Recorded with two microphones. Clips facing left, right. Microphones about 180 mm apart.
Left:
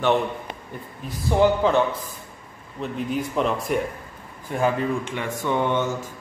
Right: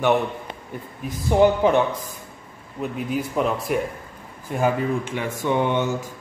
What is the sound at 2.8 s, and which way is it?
A man's voice, 5° right (ahead or behind).